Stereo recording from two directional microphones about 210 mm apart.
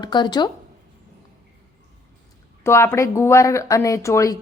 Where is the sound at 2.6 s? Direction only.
15° left (ahead or behind).